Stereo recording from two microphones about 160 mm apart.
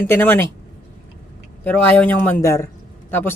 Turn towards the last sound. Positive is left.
turn(degrees=10)  # may be behind; listen again after turning